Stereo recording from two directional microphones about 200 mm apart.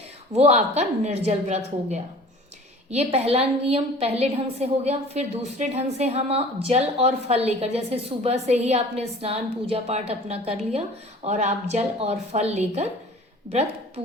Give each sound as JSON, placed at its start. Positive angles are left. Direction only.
{"t": 0.3, "sound": "a woman's voice", "side_deg": -30}